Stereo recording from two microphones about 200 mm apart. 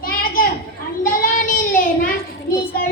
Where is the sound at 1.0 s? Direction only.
45° left (ahead or behind).